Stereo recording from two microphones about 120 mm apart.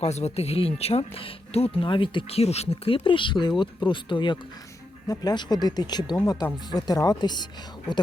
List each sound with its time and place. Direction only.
0.0 s speech: 65° left (ahead or behind); by 7.4 s 35° left (ahead or behind)